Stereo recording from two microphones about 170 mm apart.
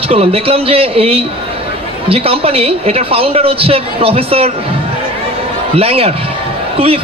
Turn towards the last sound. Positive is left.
turn(degrees=-35)  # may be behind; listen again after turning